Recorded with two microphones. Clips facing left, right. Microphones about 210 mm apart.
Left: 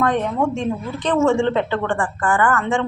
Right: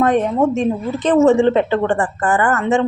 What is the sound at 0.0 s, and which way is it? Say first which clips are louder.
Speech: right 4 dB; 20° right (ahead or behind).